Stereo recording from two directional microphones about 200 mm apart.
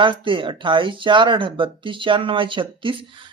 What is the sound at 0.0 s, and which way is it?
Speech, 25° right (ahead or behind).